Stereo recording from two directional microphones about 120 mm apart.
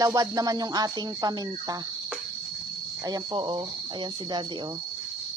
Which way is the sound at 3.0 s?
35° right (ahead or behind).